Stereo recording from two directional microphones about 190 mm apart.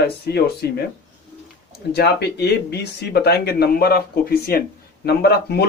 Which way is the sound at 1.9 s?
60° left (ahead or behind).